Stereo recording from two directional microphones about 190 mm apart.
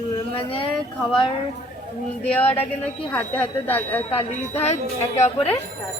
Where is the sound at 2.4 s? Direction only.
30° left (ahead or behind).